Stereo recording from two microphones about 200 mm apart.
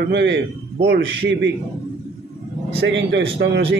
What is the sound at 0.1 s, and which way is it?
Speech, 60° right (ahead or behind).